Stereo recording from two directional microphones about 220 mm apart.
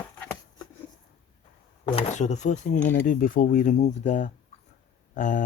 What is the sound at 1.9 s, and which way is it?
Speech, 30° left (ahead or behind).